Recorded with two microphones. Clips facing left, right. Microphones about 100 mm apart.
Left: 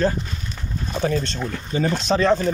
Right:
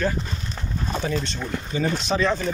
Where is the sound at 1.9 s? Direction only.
35° left (ahead or behind).